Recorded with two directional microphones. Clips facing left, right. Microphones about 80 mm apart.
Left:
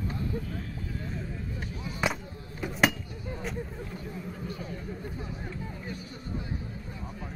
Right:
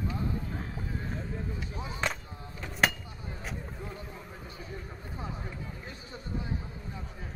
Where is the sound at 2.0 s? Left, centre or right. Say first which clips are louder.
Left 3 dB; centre.